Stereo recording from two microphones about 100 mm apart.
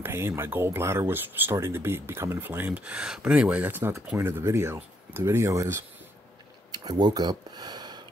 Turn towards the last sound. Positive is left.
turn(degrees=-45)  # may be behind; listen again after turning